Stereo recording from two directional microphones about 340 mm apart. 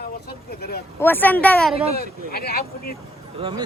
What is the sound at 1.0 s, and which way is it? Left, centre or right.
Speech, centre.